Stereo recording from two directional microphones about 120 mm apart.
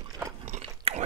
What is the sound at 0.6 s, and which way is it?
Biting, 55° right (ahead or behind).